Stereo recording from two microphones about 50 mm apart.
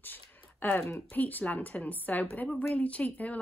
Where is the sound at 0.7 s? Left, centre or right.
Left.